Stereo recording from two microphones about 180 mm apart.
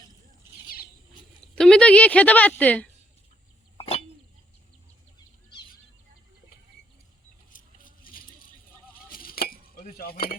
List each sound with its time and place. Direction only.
1.5 s a woman's voice: 5° left (ahead or behind)
3.8 s bird: 30° left (ahead or behind)
7.5 s mouse: 50° left (ahead or behind)
9.0 s a sound: 55° left (ahead or behind)